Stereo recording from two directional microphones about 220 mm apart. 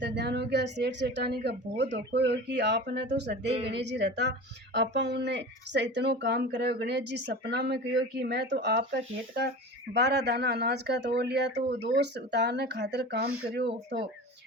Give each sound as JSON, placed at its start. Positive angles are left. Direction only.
{"t": 0.0, "sound": "speech", "side_deg": -50}